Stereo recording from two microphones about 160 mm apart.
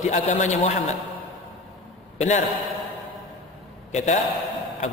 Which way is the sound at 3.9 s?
45° left (ahead or behind).